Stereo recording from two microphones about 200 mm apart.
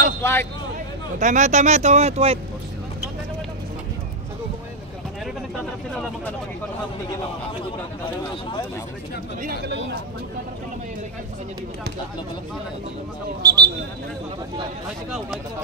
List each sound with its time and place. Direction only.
0.2 s speech: 10° left (ahead or behind)
1.2 s speech: 40° right (ahead or behind)
9.4 s speech: 50° right (ahead or behind)
13.4 s speech: 55° right (ahead or behind)